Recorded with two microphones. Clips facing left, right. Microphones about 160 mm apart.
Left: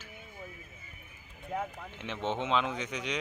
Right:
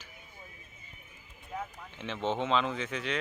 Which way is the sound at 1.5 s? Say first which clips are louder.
Left 4 dB; 60° left (ahead or behind).